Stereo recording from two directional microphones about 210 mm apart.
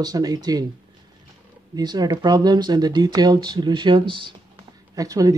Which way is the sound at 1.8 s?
20° right (ahead or behind).